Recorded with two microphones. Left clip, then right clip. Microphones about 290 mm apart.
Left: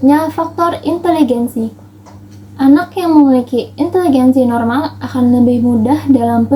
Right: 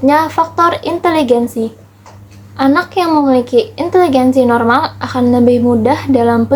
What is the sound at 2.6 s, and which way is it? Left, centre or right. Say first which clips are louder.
Speech: even; centre.